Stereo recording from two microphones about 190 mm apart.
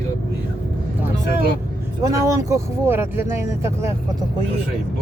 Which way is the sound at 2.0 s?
15° right (ahead or behind).